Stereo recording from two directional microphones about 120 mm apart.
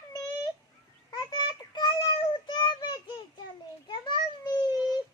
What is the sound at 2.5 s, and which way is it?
Child singing, 40° left (ahead or behind).